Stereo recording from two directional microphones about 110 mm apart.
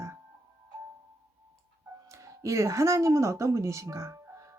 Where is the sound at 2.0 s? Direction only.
30° right (ahead or behind).